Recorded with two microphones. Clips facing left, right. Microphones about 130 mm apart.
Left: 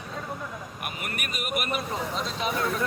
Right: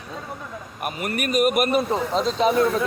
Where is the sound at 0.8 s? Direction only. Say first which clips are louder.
Right 11 dB; 40° right (ahead or behind).